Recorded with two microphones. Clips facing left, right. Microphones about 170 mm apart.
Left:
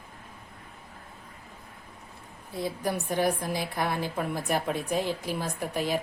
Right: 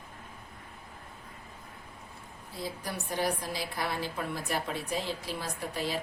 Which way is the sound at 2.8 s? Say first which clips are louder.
Left 5 dB; 55° left (ahead or behind).